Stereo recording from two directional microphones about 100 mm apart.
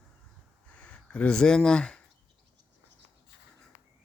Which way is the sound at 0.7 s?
10° left (ahead or behind).